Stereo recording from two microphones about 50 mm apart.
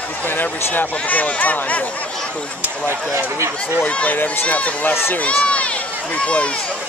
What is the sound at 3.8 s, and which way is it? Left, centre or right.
Speech, left.